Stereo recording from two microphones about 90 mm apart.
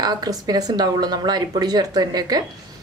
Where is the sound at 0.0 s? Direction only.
50° right (ahead or behind).